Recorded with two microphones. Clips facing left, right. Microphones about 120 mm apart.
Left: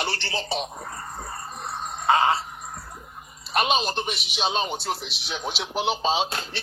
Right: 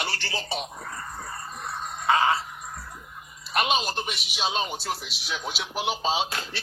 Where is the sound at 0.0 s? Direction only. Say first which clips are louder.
Left 3 dB; 30° left (ahead or behind).